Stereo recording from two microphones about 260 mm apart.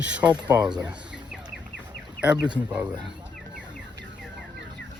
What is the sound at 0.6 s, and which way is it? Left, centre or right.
Speech, centre.